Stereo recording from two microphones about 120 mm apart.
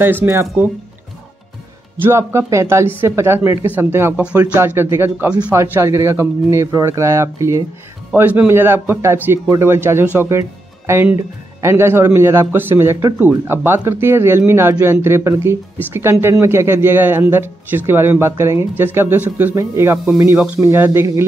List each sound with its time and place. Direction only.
0.0 s a man's voice: 20° right (ahead or behind)
2.0 s a man's voice: 25° right (ahead or behind)
4.6 s a man's voice: 20° right (ahead or behind)
5.6 s a man's voice: 25° right (ahead or behind)
8.1 s a man's voice: 10° right (ahead or behind)
20.3 s a man's voice: 10° right (ahead or behind)